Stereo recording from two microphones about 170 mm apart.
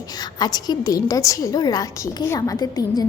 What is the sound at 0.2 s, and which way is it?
A woman's voice, 25° left (ahead or behind).